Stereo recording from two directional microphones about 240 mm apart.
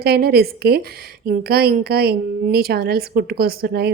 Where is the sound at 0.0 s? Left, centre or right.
Right.